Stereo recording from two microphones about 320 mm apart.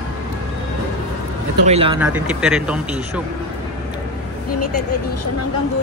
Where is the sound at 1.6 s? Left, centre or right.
Centre.